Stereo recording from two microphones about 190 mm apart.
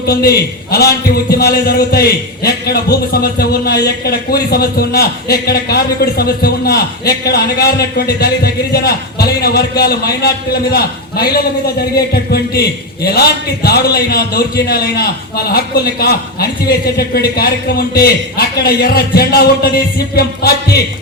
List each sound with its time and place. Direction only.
0.0 s a man's voice: 55° left (ahead or behind)